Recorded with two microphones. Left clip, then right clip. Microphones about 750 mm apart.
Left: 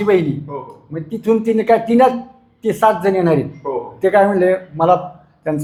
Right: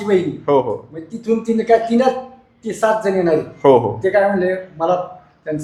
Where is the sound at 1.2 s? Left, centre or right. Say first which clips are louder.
Left 3 dB; left.